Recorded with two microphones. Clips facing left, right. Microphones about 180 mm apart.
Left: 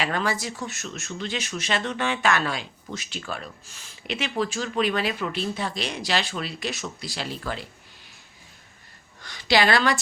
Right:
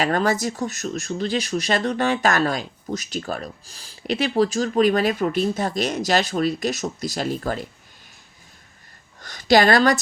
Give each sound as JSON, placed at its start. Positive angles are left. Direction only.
{"t": 0.0, "sound": "speech", "side_deg": -45}
{"t": 9.2, "sound": "a woman's voice", "side_deg": -45}